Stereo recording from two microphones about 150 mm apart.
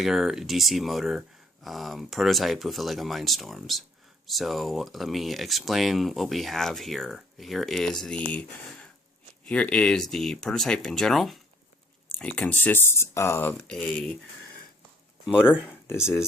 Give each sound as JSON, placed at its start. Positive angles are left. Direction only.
{"t": 0.0, "sound": "speech", "side_deg": 0}
{"t": 15.6, "sound": "speech", "side_deg": 15}